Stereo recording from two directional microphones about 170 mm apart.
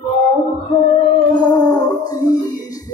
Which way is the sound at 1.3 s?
25° left (ahead or behind).